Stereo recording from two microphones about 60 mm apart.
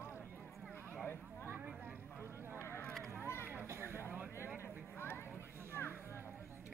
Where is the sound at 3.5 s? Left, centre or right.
Right.